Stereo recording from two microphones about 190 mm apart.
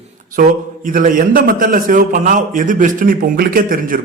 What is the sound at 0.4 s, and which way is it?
A man's voice, 45° right (ahead or behind).